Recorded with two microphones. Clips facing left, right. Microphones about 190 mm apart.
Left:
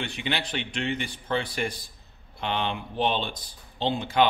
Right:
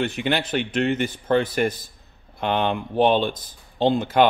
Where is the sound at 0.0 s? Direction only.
50° right (ahead or behind).